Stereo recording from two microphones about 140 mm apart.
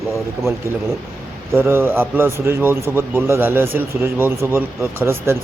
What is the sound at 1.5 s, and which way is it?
Speech, 15° right (ahead or behind).